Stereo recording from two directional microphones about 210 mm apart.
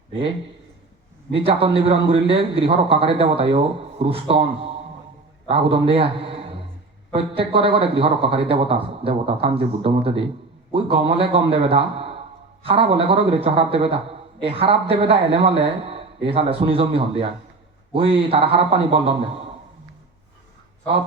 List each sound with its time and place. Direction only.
1.3 s a man's voice: 25° right (ahead or behind)